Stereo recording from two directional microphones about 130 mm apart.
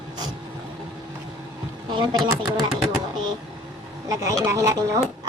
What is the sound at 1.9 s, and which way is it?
Speech, 35° right (ahead or behind).